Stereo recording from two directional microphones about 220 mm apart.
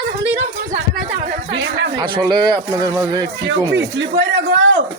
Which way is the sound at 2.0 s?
20° right (ahead or behind).